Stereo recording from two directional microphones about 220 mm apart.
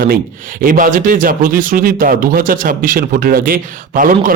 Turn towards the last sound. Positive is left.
turn(degrees=-40)  # may be behind; listen again after turning